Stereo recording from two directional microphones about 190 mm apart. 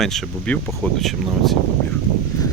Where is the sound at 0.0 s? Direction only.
5° left (ahead or behind).